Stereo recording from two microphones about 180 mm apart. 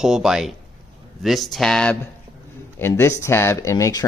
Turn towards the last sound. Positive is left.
turn(degrees=20)  # may be behind; listen again after turning